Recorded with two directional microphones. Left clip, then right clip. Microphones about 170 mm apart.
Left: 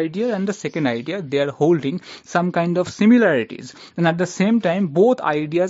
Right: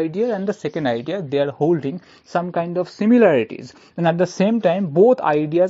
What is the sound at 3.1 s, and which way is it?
Speech, centre (ahead or behind).